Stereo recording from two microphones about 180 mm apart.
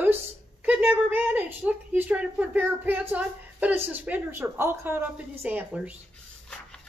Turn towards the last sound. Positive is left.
turn(degrees=-10)  # may be behind; listen again after turning